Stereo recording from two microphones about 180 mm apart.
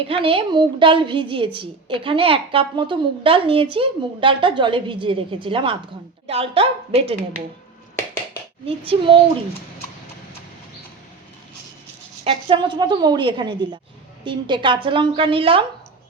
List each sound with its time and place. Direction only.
0.1 s a woman's voice: 30° right (ahead or behind)
8.6 s a woman's voice: 30° right (ahead or behind)
12.2 s a woman's voice: 30° right (ahead or behind)